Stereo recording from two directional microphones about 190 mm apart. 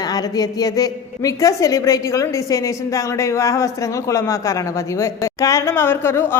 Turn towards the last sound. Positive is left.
turn(degrees=10)  # may be behind; listen again after turning